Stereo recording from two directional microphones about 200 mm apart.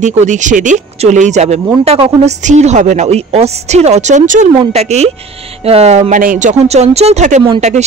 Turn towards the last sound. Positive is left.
turn(degrees=-35)  # may be behind; listen again after turning